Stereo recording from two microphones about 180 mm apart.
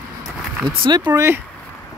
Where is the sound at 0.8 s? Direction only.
30° right (ahead or behind).